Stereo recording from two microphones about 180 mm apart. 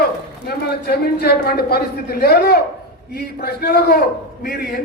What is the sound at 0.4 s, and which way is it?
A man's voice, 60° left (ahead or behind).